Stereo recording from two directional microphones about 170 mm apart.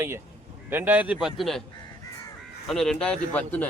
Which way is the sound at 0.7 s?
10° right (ahead or behind).